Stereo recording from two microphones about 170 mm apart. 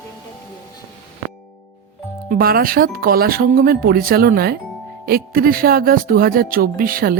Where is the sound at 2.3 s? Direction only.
60° right (ahead or behind).